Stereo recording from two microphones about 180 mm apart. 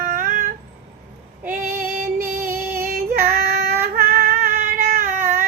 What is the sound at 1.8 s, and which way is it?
Music, 55° right (ahead or behind).